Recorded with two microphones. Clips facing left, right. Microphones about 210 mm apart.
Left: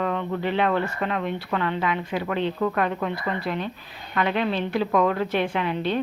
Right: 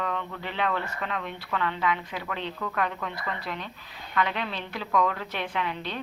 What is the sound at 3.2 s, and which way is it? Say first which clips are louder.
A woman's voice: left 7 dB; 55° left (ahead or behind).